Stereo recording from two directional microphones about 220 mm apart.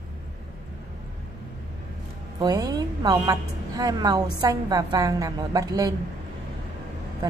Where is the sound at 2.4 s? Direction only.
15° right (ahead or behind).